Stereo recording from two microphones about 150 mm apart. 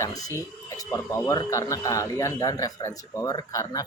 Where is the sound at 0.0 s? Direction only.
25° left (ahead or behind).